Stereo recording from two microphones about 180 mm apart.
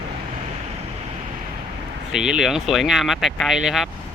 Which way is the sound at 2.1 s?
5° right (ahead or behind).